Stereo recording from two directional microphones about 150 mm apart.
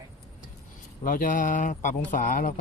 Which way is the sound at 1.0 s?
65° left (ahead or behind).